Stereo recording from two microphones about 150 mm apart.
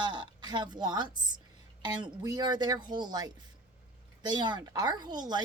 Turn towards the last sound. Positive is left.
turn(degrees=-30)  # may be behind; listen again after turning